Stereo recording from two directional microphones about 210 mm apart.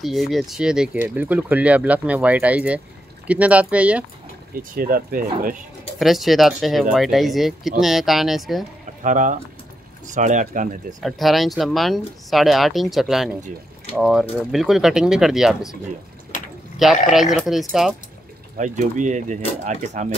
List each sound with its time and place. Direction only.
0.0 s speech: centre (ahead or behind)
4.7 s speech: 45° right (ahead or behind)
5.9 s speech: centre (ahead or behind)
9.0 s speech: 35° right (ahead or behind)
11.0 s speech: centre (ahead or behind)
16.7 s speech: centre (ahead or behind)
18.6 s speech: 35° right (ahead or behind)